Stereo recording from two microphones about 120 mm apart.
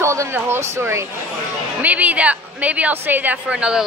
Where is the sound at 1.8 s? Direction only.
10° right (ahead or behind).